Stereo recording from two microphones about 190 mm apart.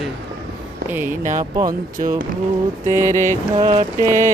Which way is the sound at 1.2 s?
40° right (ahead or behind).